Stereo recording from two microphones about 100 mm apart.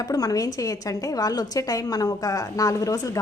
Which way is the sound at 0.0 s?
35° left (ahead or behind).